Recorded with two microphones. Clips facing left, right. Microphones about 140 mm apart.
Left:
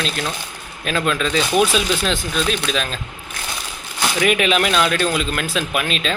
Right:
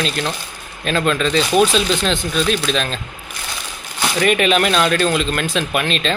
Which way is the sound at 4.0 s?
5° left (ahead or behind).